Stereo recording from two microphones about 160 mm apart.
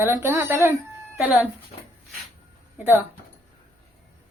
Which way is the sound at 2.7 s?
15° right (ahead or behind).